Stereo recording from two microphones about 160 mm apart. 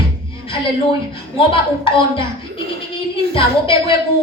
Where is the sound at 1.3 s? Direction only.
35° left (ahead or behind).